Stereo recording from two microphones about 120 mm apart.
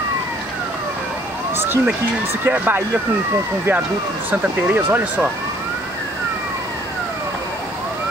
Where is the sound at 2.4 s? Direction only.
15° right (ahead or behind).